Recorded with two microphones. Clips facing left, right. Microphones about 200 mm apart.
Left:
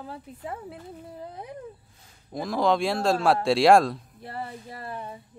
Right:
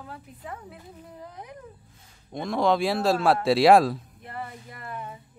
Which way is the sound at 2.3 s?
Centre (ahead or behind).